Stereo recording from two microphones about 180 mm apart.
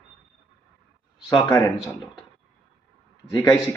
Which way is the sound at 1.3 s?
20° left (ahead or behind).